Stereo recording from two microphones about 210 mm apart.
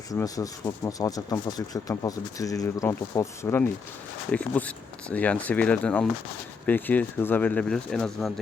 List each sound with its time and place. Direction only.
0.1 s speech: 15° left (ahead or behind)